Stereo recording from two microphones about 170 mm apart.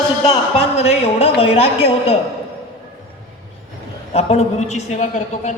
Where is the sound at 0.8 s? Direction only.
35° left (ahead or behind).